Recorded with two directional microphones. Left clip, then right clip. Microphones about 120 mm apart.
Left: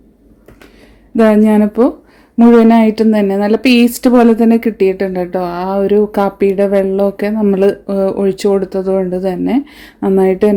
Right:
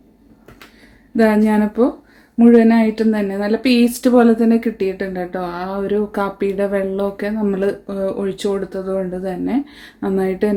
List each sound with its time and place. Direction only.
1.1 s speech: 60° left (ahead or behind)